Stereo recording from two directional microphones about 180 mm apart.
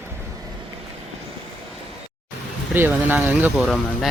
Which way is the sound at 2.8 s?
10° right (ahead or behind).